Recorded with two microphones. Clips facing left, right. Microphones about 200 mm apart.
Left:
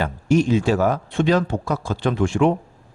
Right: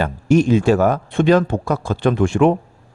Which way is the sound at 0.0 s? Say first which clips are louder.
Right 3 dB; 50° right (ahead or behind).